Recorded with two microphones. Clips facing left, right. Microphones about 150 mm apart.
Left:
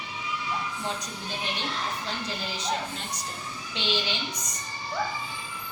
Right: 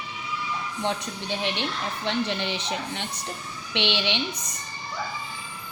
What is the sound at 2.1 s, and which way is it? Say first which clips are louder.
A woman's voice: right 7 dB; 75° right (ahead or behind).